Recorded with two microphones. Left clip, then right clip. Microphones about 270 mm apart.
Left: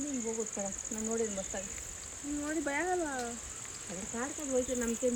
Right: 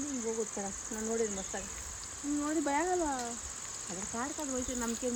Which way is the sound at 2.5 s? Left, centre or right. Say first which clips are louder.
Right 1 dB; right.